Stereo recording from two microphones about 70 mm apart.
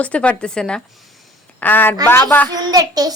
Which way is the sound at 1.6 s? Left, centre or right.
Left.